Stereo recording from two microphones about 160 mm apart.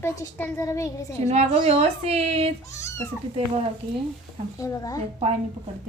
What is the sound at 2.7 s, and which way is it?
Speech, 20° left (ahead or behind).